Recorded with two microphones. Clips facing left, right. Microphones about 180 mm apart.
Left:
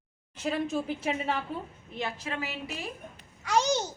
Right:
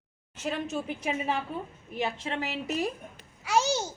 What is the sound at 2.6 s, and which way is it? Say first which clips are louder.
Speech: right 8 dB; 40° right (ahead or behind).